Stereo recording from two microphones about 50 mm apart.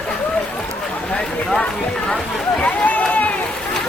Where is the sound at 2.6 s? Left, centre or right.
Left.